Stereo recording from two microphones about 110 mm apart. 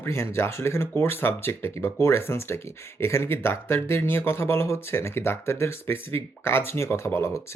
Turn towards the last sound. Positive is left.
turn(degrees=25)  # may be behind; listen again after turning